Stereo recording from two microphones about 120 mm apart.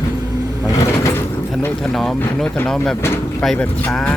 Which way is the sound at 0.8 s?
25° left (ahead or behind).